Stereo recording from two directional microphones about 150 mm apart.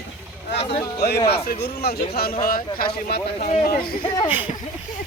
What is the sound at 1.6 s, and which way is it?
Speech, 90° left.